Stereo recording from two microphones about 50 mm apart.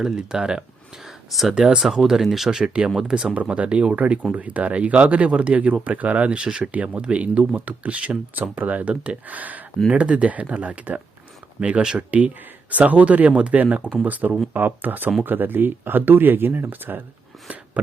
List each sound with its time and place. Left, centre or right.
0.0 s speech: centre
1.3 s speech: centre
1.5 s speech: centre
1.8 s speech: centre; by 9.6 s right
9.9 s speech: right
12.7 s speech: right